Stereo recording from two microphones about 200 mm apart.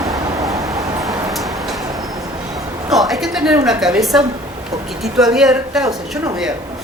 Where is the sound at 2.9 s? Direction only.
Centre (ahead or behind).